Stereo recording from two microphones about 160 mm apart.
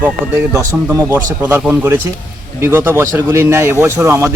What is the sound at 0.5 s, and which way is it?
Speech, 20° right (ahead or behind).